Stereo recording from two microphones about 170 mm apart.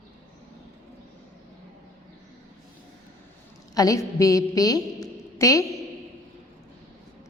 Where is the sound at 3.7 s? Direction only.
20° left (ahead or behind).